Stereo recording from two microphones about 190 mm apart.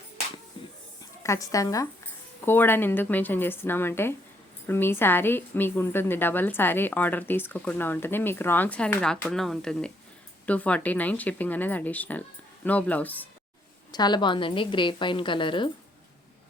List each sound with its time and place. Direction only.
1.2 s a woman's voice: 15° left (ahead or behind)
13.9 s a woman's voice: 20° left (ahead or behind)